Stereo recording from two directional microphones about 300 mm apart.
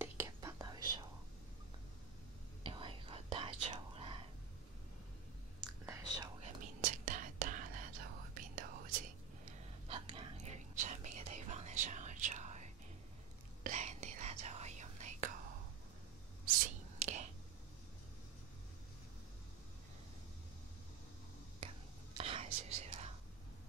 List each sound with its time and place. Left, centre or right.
0.0 s whispering: centre
2.6 s whispering: centre
5.7 s whispering: centre
6.8 s whispering: right
9.8 s whispering: centre
13.7 s whispering: right
17.0 s whispering: right
21.5 s whispering: centre